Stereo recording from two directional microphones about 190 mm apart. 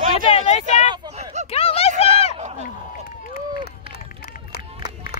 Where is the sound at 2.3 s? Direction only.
35° right (ahead or behind).